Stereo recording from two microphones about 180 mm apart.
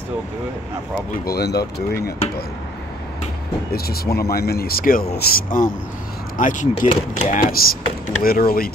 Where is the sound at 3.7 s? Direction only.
60° left (ahead or behind).